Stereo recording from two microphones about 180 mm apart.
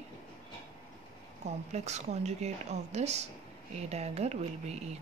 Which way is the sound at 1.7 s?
40° right (ahead or behind).